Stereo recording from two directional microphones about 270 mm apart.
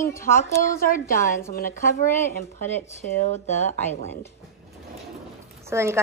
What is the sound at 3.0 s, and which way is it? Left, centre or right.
Speech, left.